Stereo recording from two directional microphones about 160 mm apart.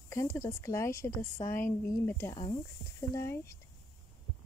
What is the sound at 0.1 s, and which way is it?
A woman's voice, 20° left (ahead or behind).